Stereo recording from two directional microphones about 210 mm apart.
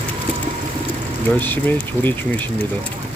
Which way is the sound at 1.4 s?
10° left (ahead or behind).